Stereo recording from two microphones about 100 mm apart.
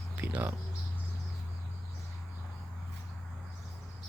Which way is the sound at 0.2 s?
15° right (ahead or behind).